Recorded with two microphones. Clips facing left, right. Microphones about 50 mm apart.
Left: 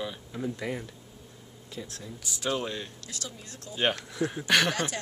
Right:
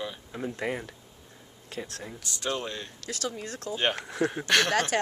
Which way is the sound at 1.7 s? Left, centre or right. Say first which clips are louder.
Right 3 dB; right.